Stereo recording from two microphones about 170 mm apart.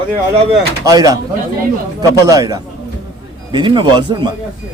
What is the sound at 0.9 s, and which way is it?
Speech, 20° right (ahead or behind).